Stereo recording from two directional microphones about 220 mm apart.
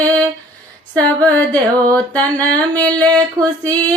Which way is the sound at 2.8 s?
15° right (ahead or behind).